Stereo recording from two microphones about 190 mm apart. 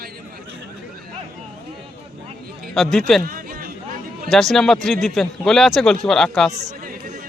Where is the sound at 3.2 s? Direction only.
50° right (ahead or behind).